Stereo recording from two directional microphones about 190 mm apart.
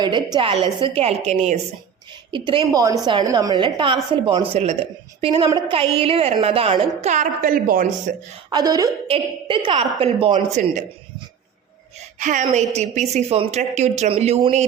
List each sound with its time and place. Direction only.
0.0 s a woman's voice: 25° right (ahead or behind)
2.3 s a woman's voice: 25° right (ahead or behind); by 8.1 s 45° right (ahead or behind)
8.4 s a woman's voice: 20° right (ahead or behind); by 10.8 s 40° right (ahead or behind)
12.2 s speech: 40° right (ahead or behind)